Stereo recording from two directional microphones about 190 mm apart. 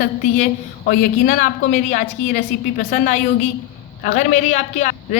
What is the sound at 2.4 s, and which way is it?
A woman's voice, 50° left (ahead or behind).